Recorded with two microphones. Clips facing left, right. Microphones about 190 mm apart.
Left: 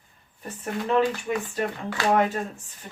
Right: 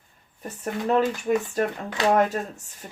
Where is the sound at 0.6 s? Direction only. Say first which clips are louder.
Right 1 dB; 40° right (ahead or behind).